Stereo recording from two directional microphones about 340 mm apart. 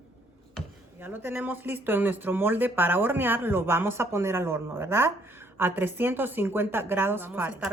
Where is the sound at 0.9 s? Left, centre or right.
Centre.